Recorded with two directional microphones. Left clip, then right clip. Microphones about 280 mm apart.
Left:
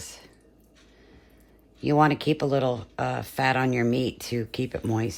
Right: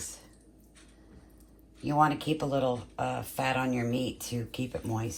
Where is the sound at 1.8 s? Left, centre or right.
Left.